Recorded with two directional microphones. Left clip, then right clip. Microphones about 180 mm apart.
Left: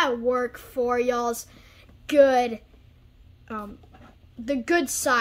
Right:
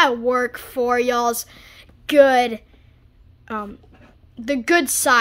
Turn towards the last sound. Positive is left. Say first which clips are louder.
# right 6 dB
turn(degrees=-30)  # may be behind; listen again after turning